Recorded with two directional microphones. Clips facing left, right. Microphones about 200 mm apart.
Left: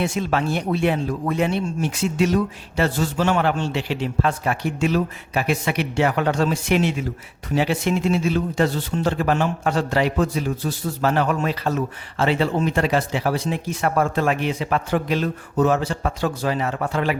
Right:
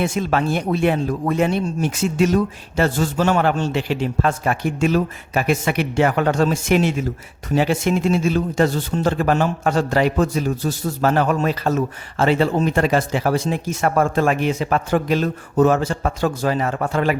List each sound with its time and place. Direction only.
0.0 s a man's voice: 50° right (ahead or behind)